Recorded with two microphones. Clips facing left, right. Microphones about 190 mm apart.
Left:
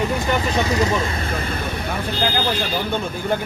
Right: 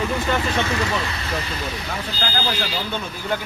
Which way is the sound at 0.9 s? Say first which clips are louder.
Left 3 dB; 50° left (ahead or behind).